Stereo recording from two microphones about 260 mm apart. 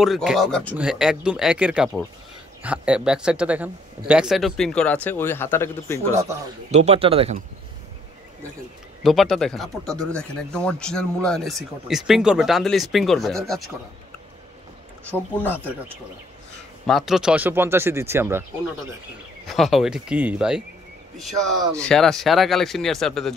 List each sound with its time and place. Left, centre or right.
0.0 s speech: centre
6.7 s speech: right
9.0 s speech: centre
15.0 s speech: centre
16.8 s speech: centre
19.5 s speech: centre
21.8 s speech: centre